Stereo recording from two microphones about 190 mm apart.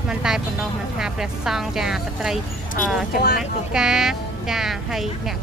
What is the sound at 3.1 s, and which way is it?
Speech, 55° left (ahead or behind).